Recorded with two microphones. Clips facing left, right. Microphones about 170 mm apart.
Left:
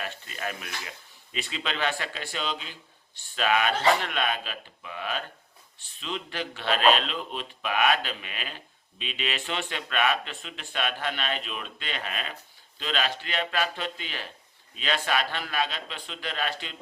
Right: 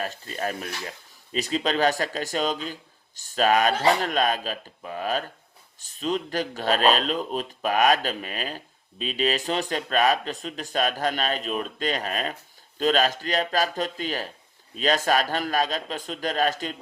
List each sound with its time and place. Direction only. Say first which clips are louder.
0.0 s speech: right 5 dB; 40° right (ahead or behind)